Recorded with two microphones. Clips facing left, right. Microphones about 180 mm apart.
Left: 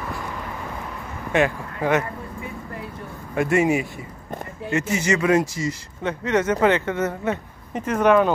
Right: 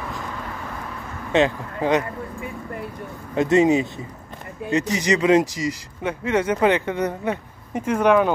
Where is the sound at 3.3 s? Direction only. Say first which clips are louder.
Right 3 dB; 20° right (ahead or behind).